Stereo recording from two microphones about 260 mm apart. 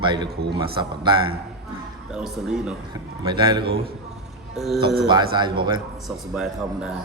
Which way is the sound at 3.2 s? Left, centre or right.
Centre.